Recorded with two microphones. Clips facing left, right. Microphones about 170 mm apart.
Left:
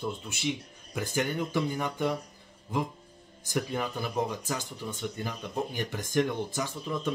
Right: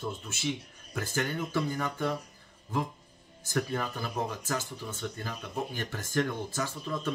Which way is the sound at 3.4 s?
15° left (ahead or behind).